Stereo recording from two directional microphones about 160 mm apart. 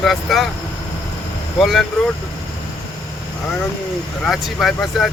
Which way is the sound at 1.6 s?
Centre (ahead or behind).